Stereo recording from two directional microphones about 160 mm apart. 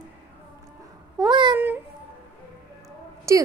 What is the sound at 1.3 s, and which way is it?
Child singing, 30° right (ahead or behind).